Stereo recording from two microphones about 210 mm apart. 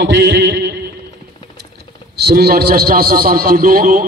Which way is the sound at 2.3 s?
50° right (ahead or behind).